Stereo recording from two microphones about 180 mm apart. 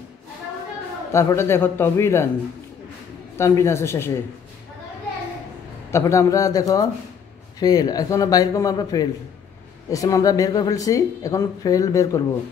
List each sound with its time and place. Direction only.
1.1 s a man's voice: 15° left (ahead or behind)
3.3 s a man's voice: 15° left (ahead or behind)
5.9 s a man's voice: 15° left (ahead or behind)